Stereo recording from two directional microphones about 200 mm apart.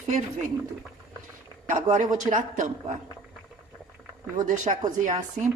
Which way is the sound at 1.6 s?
40° right (ahead or behind).